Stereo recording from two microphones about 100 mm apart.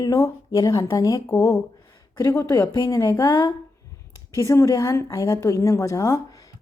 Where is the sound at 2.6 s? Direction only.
45° left (ahead or behind).